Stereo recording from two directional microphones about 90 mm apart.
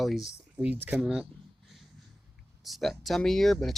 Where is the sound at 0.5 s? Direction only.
20° right (ahead or behind).